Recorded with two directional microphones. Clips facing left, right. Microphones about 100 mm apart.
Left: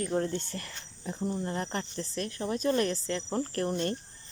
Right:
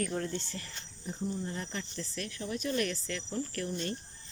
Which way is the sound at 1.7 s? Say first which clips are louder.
Left 5 dB; 40° left (ahead or behind).